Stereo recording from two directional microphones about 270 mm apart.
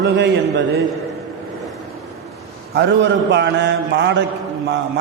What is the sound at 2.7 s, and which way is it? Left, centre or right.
A man's voice, right.